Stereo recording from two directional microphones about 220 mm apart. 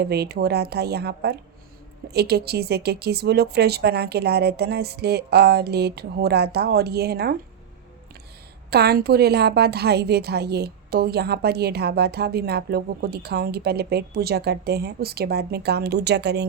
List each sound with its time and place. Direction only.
0.0 s a woman's voice: 45° right (ahead or behind)
8.7 s a woman's voice: 45° right (ahead or behind)